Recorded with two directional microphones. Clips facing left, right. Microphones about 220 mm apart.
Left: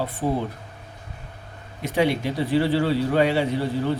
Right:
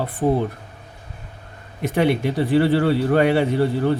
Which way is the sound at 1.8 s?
55° right (ahead or behind).